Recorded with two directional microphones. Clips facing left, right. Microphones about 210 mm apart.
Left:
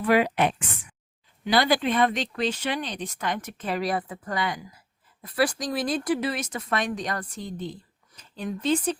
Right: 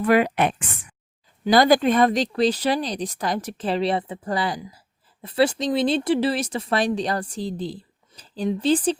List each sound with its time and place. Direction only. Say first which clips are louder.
0.0 s a woman's voice: right 3 dB; 50° right (ahead or behind); by 9.0 s 30° right (ahead or behind)